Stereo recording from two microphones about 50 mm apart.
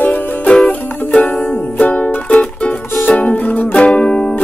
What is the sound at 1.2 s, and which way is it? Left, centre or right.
Music, left.